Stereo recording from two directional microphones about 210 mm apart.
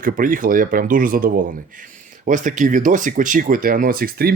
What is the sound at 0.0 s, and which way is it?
Speech, 40° right (ahead or behind).